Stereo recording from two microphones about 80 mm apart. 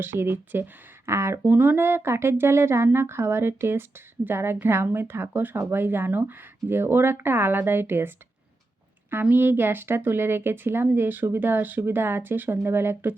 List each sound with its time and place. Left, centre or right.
0.0 s speech: right
9.3 s speech: right